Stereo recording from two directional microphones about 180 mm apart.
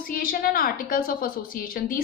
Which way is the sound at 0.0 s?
55° left (ahead or behind).